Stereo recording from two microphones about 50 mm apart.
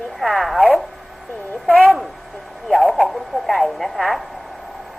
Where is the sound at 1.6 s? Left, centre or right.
Left.